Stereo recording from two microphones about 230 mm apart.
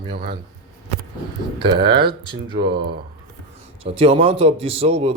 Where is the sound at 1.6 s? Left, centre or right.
Right.